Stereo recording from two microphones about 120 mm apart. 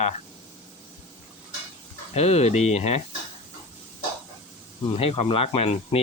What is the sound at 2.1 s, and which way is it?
Speech, 60° left (ahead or behind).